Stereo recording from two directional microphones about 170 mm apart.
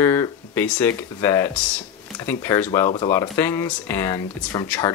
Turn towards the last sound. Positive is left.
turn(degrees=20)  # may be behind; listen again after turning